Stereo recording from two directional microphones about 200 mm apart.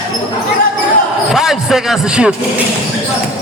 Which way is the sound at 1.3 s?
Centre (ahead or behind).